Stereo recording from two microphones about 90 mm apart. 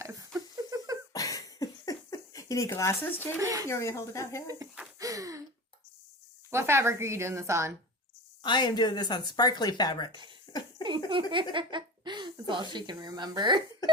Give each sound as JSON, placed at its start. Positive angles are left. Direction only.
{"t": 0.0, "sound": "a sound", "side_deg": -35}
{"t": 1.1, "sound": "a sound", "side_deg": 40}
{"t": 3.3, "sound": "a woman's voice", "side_deg": -40}
{"t": 3.7, "sound": "speech", "side_deg": 30}
{"t": 4.9, "sound": "gasp", "side_deg": -40}
{"t": 6.5, "sound": "a woman's voice", "side_deg": -30}
{"t": 8.4, "sound": "speech", "side_deg": 55}
{"t": 10.8, "sound": "a sound", "side_deg": -65}
{"t": 11.5, "sound": "chuckle", "side_deg": -60}
{"t": 12.7, "sound": "speech", "side_deg": -45}